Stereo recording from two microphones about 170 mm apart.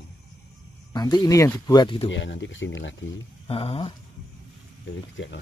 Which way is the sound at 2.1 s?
90° left.